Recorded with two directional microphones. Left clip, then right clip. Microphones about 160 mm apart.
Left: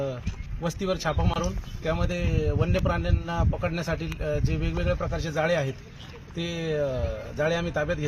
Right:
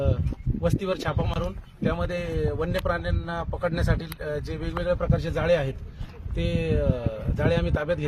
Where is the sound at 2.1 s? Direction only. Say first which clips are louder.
Right 1 dB; centre (ahead or behind).